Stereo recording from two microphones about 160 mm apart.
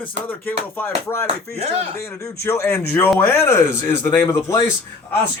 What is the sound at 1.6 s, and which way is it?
Speech, 40° right (ahead or behind).